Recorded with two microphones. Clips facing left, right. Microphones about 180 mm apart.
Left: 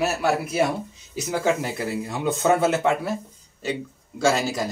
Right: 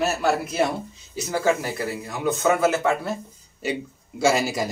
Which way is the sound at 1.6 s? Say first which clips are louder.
Left 1 dB; 25° left (ahead or behind).